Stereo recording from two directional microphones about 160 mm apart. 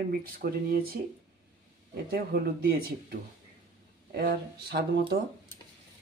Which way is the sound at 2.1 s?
70° right (ahead or behind).